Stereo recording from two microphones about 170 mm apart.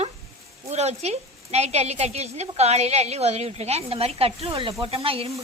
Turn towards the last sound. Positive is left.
turn(degrees=-35)  # may be behind; listen again after turning